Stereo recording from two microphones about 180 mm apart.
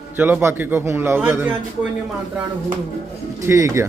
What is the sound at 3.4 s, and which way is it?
Speech, 15° right (ahead or behind).